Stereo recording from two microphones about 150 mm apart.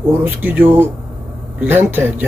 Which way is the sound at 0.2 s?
10° right (ahead or behind).